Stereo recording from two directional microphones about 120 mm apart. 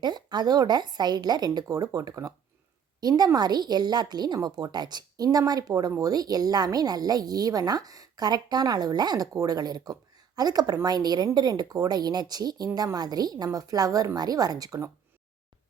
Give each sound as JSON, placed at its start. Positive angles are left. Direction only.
{"t": 0.0, "sound": "a woman's voice", "side_deg": -35}